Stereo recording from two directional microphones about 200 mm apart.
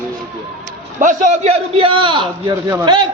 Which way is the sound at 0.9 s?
40° right (ahead or behind).